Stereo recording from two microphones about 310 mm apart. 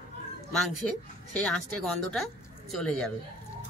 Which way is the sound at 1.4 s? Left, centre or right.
Centre.